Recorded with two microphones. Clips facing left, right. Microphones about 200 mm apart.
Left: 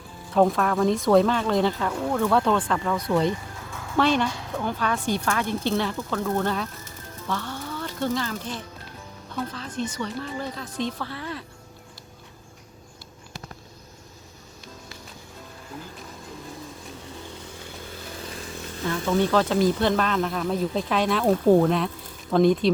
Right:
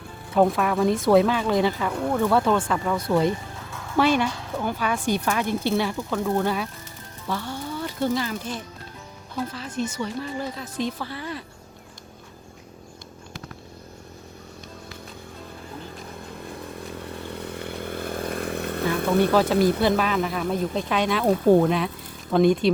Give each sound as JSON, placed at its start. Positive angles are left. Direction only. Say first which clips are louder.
{"t": 0.3, "sound": "a woman's voice", "louder": "even", "side_deg": -5}
{"t": 16.9, "sound": "chainsaw", "louder": "right 5 dB", "side_deg": -60}
{"t": 19.3, "sound": "a woman's voice", "louder": "right 2 dB", "side_deg": -10}
{"t": 19.5, "sound": "speech", "louder": "right 1 dB", "side_deg": -65}
{"t": 19.8, "sound": "speech", "louder": "right 1 dB", "side_deg": -5}